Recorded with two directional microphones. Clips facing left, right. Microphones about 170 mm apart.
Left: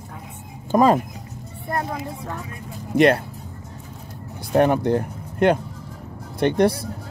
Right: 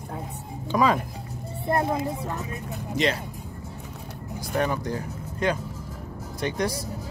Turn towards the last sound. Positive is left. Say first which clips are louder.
# left 9 dB
turn(degrees=60)  # may be behind; listen again after turning